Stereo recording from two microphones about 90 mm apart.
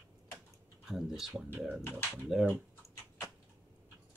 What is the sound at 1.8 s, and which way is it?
Speech, 25° left (ahead or behind).